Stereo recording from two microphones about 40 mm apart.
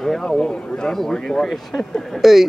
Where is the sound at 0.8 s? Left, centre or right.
Centre.